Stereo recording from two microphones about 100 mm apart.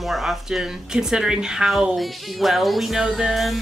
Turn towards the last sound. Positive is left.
turn(degrees=0)  # may be behind; listen again after turning